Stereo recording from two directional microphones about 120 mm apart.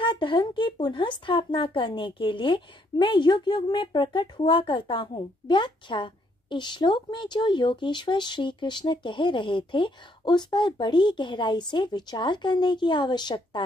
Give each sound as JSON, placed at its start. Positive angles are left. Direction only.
{"t": 0.0, "sound": "speech", "side_deg": 45}